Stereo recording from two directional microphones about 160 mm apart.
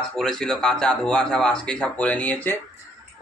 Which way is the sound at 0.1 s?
5° left (ahead or behind).